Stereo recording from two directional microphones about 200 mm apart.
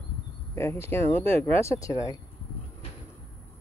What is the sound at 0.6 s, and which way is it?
Speech, 15° left (ahead or behind).